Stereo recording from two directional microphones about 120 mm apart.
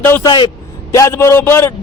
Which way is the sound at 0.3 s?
45° left (ahead or behind).